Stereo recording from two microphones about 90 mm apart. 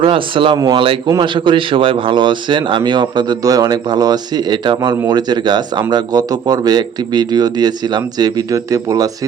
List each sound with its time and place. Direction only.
0.0 s speech: 80° right
0.5 s speech: 50° right (ahead or behind)
1.2 s speech: 65° right (ahead or behind); by 9.0 s 40° right (ahead or behind)